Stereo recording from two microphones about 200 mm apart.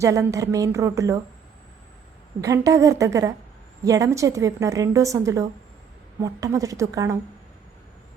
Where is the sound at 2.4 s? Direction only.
15° right (ahead or behind).